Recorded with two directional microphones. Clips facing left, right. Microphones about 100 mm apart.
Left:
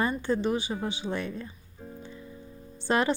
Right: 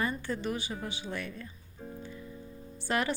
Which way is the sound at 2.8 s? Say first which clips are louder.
Left 5 dB; 25° left (ahead or behind).